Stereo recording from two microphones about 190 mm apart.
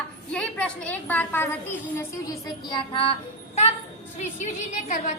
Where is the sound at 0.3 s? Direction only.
5° left (ahead or behind).